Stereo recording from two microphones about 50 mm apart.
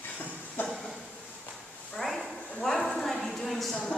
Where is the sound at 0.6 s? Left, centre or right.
Left.